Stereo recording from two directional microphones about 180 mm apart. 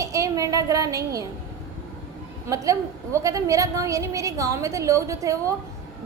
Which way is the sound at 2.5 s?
15° right (ahead or behind).